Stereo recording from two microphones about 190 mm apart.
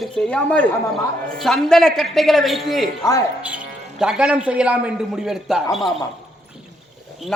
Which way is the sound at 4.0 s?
5° right (ahead or behind).